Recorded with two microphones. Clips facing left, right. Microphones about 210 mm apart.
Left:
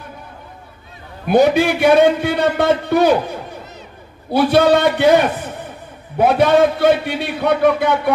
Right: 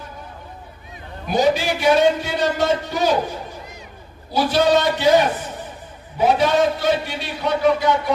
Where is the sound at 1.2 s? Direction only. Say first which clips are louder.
Left 6 dB; 60° left (ahead or behind).